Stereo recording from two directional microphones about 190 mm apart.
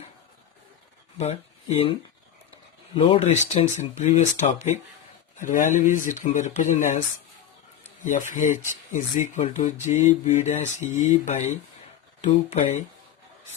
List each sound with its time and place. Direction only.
1.2 s speech: 35° left (ahead or behind)
8.0 s speech: 40° left (ahead or behind)